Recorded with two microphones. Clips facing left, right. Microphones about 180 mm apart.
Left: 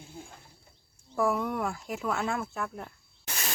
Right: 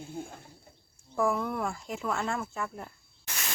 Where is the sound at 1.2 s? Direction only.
Centre (ahead or behind).